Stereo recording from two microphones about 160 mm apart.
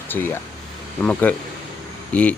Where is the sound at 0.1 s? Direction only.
10° left (ahead or behind).